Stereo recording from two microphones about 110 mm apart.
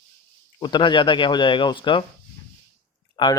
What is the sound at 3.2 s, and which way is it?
Speech, 45° left (ahead or behind).